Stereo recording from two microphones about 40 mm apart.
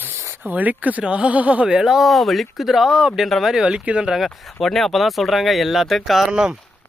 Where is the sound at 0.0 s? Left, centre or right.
Right.